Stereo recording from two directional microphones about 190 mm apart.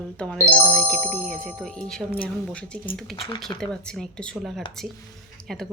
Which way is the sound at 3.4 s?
Centre (ahead or behind).